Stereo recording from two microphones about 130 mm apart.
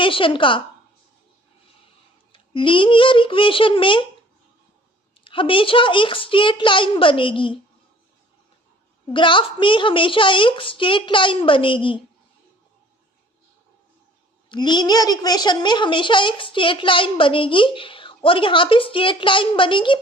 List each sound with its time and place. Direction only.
0.0 s a woman's voice: 40° left (ahead or behind)
2.3 s a woman's voice: 40° left (ahead or behind)
5.2 s a woman's voice: 40° left (ahead or behind)
9.1 s a woman's voice: 40° left (ahead or behind)
14.5 s a woman's voice: 35° left (ahead or behind)